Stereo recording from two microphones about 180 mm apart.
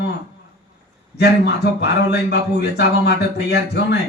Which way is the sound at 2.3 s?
70° left (ahead or behind).